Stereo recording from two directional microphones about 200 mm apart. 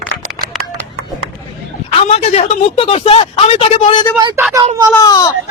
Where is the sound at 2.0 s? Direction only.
30° left (ahead or behind).